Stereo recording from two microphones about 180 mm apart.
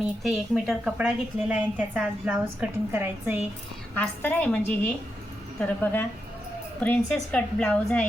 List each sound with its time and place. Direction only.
0.0 s a woman's voice: centre (ahead or behind)
3.9 s a woman's voice: 10° left (ahead or behind)